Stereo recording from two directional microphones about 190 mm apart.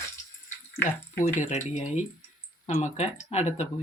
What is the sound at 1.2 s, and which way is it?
Speech, 40° left (ahead or behind).